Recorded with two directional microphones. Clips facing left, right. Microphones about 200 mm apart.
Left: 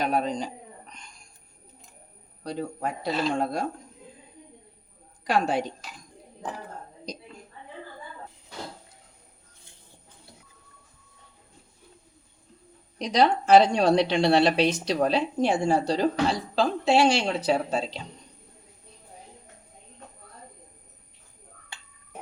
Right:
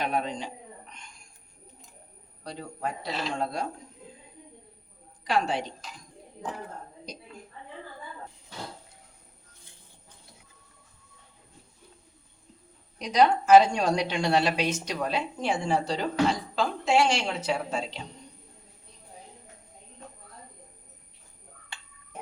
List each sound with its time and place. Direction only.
0.0 s a sound: 40° left (ahead or behind)
2.5 s speech: 50° left (ahead or behind)
5.2 s a woman's voice: 45° left (ahead or behind)
13.0 s a woman's voice: 30° left (ahead or behind)